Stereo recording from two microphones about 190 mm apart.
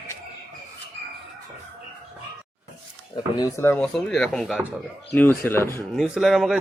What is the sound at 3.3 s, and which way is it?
Speech, 15° left (ahead or behind).